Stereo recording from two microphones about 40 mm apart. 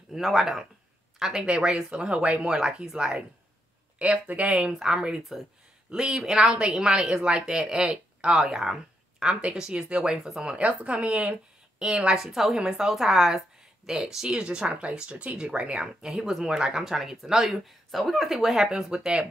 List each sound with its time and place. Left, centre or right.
0.2 s speech: centre
1.3 s speech: right
4.3 s speech: right
4.7 s speech: centre
8.4 s speech: centre
12.2 s speech: centre
16.8 s speech: centre
18.7 s speech: right